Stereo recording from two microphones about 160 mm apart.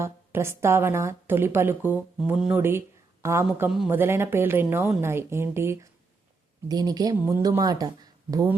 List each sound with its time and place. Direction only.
0.0 s a woman's voice: 15° right (ahead or behind)